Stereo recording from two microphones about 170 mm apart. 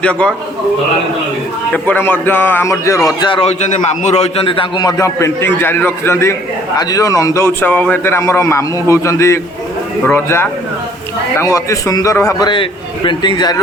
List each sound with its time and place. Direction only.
0.0 s a man's voice: 5° left (ahead or behind)
1.7 s a man's voice: 10° left (ahead or behind)
3.2 s a man's voice: 30° left (ahead or behind)
3.7 s a man's voice: 45° left (ahead or behind); by 13.6 s 25° left (ahead or behind)